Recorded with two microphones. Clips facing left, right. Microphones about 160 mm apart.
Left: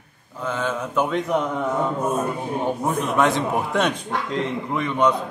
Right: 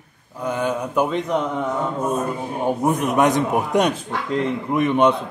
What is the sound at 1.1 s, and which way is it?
Speech, centre (ahead or behind).